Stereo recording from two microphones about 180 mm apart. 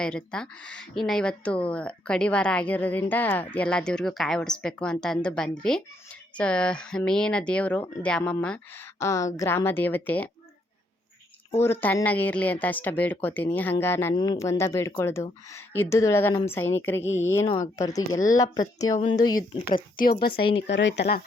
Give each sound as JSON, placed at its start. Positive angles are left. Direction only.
{"t": 0.0, "sound": "speech", "side_deg": 5}
{"t": 11.5, "sound": "speech", "side_deg": 15}
{"t": 17.1, "sound": "speech", "side_deg": 90}
{"t": 17.4, "sound": "speech", "side_deg": 30}
{"t": 17.7, "sound": "speech", "side_deg": 20}
{"t": 19.7, "sound": "speech", "side_deg": 55}
{"t": 20.6, "sound": "speech", "side_deg": 80}